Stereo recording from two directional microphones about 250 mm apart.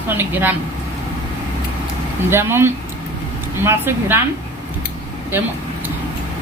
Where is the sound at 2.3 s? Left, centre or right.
Centre.